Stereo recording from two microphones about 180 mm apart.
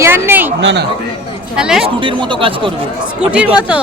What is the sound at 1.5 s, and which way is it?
Speech, 5° right (ahead or behind).